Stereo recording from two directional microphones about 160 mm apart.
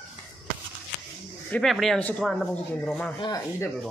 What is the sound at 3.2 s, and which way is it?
Speech, 25° left (ahead or behind).